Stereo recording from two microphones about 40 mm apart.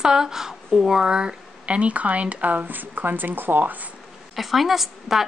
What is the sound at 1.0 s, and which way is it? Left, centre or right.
Speech, right.